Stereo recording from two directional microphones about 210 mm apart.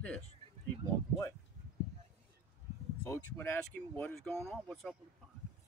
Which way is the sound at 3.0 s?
15° left (ahead or behind).